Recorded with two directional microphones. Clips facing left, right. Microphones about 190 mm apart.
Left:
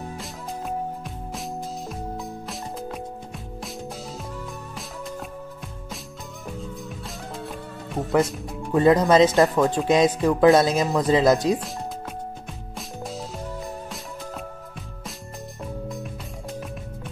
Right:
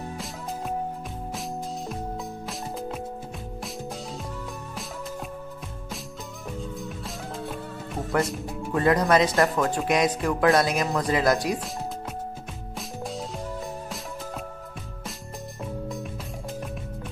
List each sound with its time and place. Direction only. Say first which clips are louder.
1.9 s music: even; centre (ahead or behind)
7.1 s music: even; centre (ahead or behind)
8.2 s speech: left 3 dB; centre (ahead or behind)
8.7 s speech: left 5 dB; 20° left (ahead or behind)
12.7 s music: even; centre (ahead or behind)
15.6 s music: even; centre (ahead or behind)